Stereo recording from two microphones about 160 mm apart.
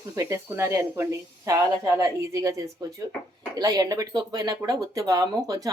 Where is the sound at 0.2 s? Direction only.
20° right (ahead or behind).